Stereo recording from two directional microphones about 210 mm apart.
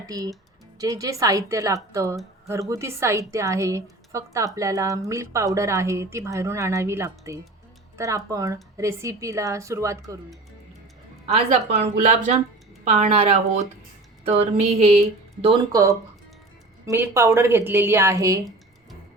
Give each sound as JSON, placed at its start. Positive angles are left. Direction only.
{"t": 0.0, "sound": "a woman's voice", "side_deg": -15}
{"t": 11.3, "sound": "a woman's voice", "side_deg": -30}
{"t": 15.7, "sound": "a woman's voice", "side_deg": -15}